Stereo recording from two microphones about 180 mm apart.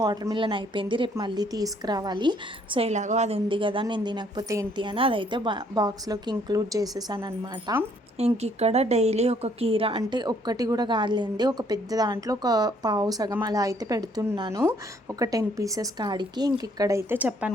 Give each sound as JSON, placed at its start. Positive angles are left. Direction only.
{"t": 0.0, "sound": "a woman's voice", "side_deg": -20}
{"t": 2.7, "sound": "a woman's voice", "side_deg": -40}